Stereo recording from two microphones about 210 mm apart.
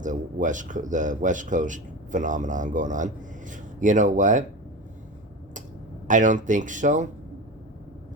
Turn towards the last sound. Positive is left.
turn(degrees=-35)  # may be behind; listen again after turning